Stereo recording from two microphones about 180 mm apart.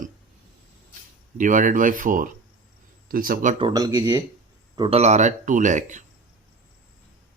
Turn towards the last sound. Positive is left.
turn(degrees=-45)  # may be behind; listen again after turning